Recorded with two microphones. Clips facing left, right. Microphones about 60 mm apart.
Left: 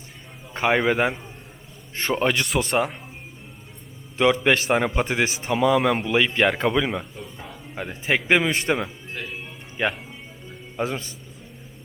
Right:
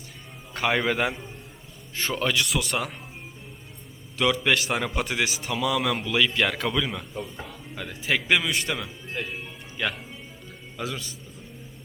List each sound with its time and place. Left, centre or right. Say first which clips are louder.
0.5 s speech: left 4 dB; left
2.1 s speech: left 4 dB; left
4.4 s a man's voice: left 5 dB; left
9.1 s speech: right 2 dB; centre
9.7 s a man's voice: left 4 dB; left